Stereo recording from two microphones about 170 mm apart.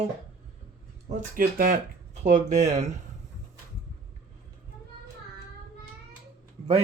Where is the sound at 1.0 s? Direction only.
55° right (ahead or behind).